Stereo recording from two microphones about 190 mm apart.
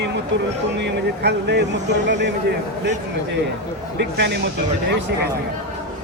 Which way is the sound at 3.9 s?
60° right (ahead or behind).